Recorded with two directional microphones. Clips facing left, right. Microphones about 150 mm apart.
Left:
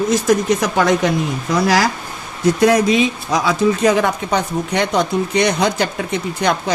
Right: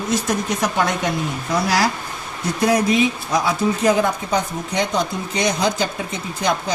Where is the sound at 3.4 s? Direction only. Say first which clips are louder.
Left 4 dB; 80° left.